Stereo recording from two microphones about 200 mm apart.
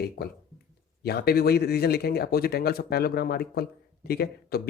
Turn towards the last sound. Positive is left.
turn(degrees=50)  # may be behind; listen again after turning